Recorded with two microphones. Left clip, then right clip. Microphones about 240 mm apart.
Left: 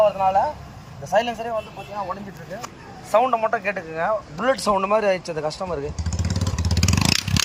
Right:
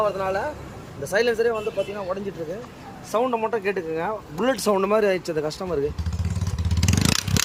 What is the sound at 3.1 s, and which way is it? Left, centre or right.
Speech, centre.